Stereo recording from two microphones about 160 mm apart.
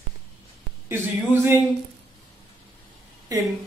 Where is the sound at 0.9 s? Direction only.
15° right (ahead or behind).